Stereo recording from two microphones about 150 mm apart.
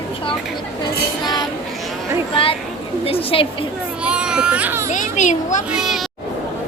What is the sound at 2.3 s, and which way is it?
A woman's voice, 35° left (ahead or behind).